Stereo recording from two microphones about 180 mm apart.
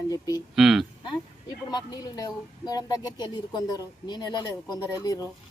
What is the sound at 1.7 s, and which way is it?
Speech, 20° left (ahead or behind).